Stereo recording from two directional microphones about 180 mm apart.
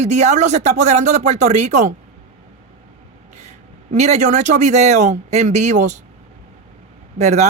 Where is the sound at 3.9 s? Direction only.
40° right (ahead or behind).